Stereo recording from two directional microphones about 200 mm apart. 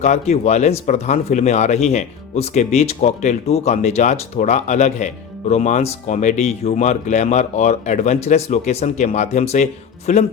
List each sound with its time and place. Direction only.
0.0 s speech: 35° left (ahead or behind)